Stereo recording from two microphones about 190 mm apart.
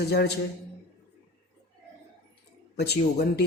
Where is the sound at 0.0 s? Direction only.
60° left (ahead or behind).